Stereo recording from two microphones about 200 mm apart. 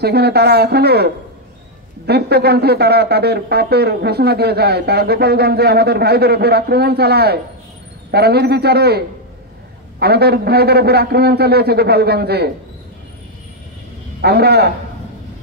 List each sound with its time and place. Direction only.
0.0 s speech: 55° right (ahead or behind)
14.2 s speech: 55° right (ahead or behind)